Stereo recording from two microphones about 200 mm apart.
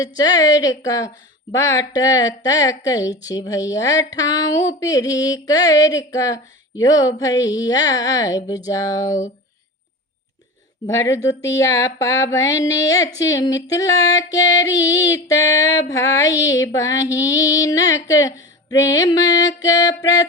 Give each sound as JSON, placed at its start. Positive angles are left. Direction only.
{"t": 0.0, "sound": "a woman's voice", "side_deg": 20}
{"t": 10.8, "sound": "a woman's voice", "side_deg": 15}